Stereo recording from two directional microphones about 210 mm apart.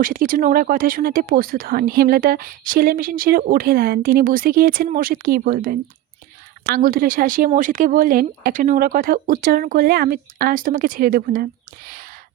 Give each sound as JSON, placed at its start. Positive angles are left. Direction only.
{"t": 0.0, "sound": "speech", "side_deg": -40}